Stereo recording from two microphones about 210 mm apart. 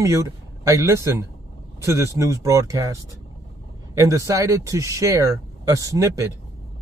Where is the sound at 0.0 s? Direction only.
15° right (ahead or behind).